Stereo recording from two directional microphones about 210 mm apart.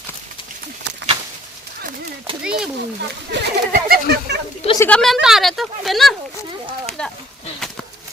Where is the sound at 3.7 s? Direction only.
45° right (ahead or behind).